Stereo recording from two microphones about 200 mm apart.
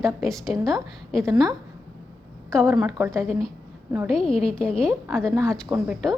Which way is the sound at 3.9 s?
Centre (ahead or behind).